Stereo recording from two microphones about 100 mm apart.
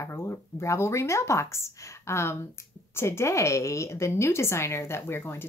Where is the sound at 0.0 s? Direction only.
25° left (ahead or behind).